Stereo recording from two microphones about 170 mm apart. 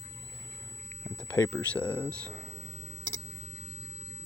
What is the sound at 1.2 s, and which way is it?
Speech, 10° left (ahead or behind).